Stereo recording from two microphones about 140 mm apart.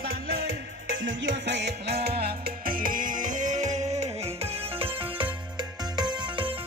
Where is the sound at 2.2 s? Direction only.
90° right.